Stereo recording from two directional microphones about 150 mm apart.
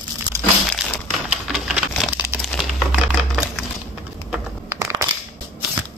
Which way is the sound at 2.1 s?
15° right (ahead or behind).